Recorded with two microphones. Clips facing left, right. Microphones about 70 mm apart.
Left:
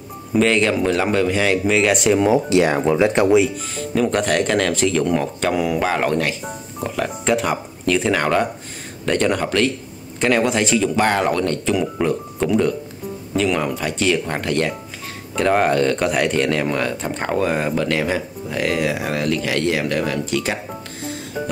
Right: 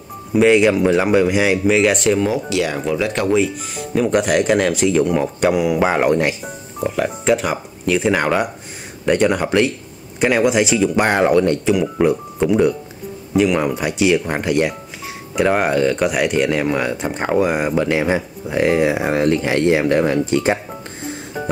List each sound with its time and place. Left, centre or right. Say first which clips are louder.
0.3 s speech: right 4 dB; centre
2.1 s speech: left 3 dB; centre
2.5 s speech: left 4 dB; left
3.7 s speech: right 3 dB; centre
6.8 s speech: right 4 dB; centre; by 20.5 s right